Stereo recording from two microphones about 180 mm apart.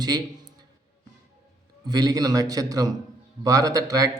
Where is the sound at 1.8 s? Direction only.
20° right (ahead or behind).